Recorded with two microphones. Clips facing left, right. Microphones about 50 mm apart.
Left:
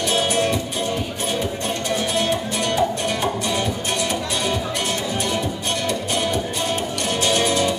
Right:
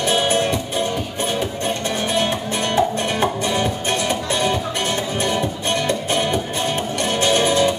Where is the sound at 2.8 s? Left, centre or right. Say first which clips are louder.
Right 4 dB; right.